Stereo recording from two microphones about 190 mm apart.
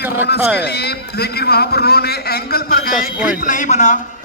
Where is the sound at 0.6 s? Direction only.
55° left (ahead or behind).